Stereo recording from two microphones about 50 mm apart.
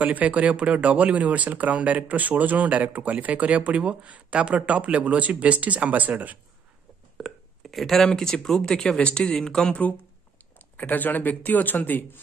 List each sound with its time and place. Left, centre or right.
0.0 s speech: right
7.2 s burping: centre
7.6 s speech: centre
10.8 s speech: left